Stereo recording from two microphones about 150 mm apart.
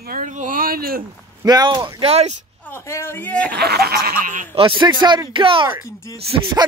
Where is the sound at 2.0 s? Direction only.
45° right (ahead or behind).